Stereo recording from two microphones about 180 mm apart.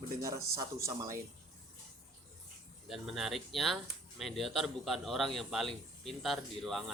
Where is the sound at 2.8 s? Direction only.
Centre (ahead or behind).